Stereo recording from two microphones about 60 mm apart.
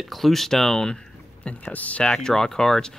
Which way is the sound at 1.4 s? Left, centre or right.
Left.